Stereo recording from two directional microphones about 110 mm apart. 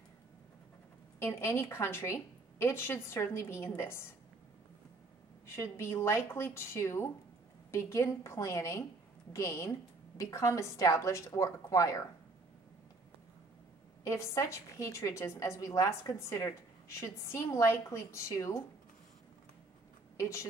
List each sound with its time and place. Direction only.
1.2 s a woman's voice: 25° left (ahead or behind)
5.6 s a woman's voice: 25° left (ahead or behind)
14.0 s a woman's voice: 25° left (ahead or behind)
20.2 s a woman's voice: 25° left (ahead or behind)